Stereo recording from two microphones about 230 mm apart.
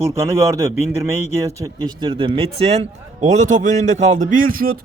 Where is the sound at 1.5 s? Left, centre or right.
Centre.